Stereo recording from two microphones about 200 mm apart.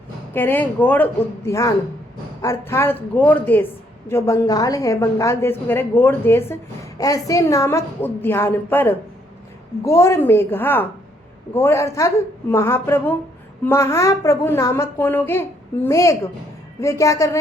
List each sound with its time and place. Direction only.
0.3 s a woman's voice: 10° left (ahead or behind)